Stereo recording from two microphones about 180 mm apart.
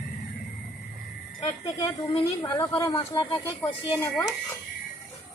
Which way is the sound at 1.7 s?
25° left (ahead or behind).